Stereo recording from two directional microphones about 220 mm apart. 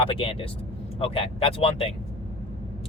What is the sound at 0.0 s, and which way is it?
Speech, 25° left (ahead or behind).